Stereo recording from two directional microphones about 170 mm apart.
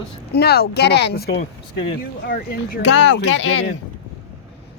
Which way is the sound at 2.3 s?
60° left (ahead or behind).